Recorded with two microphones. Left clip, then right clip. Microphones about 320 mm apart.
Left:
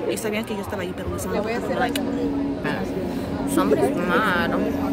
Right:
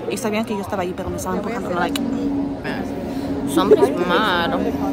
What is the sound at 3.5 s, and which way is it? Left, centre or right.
Goat, centre.